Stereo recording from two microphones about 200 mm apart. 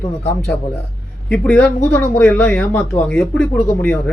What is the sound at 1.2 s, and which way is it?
Speech, 5° left (ahead or behind).